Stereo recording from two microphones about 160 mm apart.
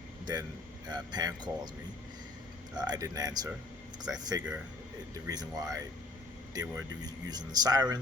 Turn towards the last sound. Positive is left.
turn(degrees=-25)  # may be behind; listen again after turning